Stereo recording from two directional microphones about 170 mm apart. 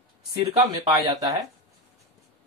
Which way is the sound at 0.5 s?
20° right (ahead or behind).